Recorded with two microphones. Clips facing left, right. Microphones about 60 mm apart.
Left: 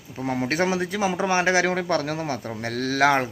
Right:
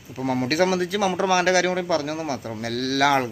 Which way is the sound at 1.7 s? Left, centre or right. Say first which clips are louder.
Even; left.